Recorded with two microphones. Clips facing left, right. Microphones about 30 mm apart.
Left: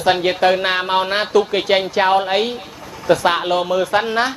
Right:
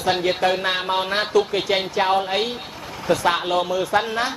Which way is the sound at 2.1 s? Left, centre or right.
Left.